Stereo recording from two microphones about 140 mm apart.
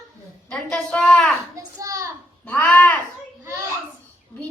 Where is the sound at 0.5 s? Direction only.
5° left (ahead or behind).